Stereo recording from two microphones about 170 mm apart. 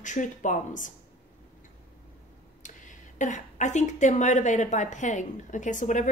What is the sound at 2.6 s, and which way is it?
Speech, 50° left (ahead or behind).